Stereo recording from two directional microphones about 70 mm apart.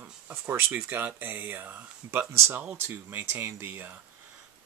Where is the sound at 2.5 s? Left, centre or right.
Right.